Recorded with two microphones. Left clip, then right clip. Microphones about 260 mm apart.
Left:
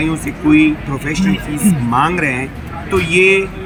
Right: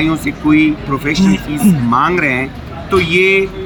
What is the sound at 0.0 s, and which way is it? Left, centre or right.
Speech, centre.